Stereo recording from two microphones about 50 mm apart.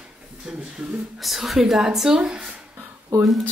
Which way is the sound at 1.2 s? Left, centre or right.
Centre.